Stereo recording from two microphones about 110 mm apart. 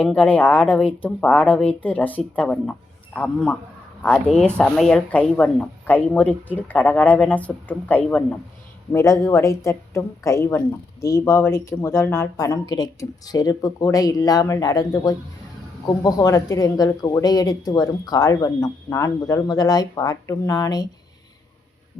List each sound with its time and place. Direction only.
0.0 s speech: 10° left (ahead or behind)
8.9 s a woman's voice: 25° left (ahead or behind)